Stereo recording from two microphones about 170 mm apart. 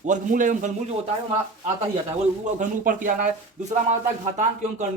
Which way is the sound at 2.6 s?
50° right (ahead or behind).